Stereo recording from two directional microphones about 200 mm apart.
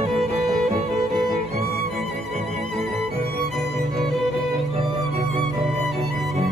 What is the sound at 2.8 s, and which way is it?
Music, 30° right (ahead or behind).